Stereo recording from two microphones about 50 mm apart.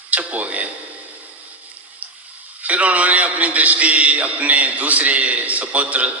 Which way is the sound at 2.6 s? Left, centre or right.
Right.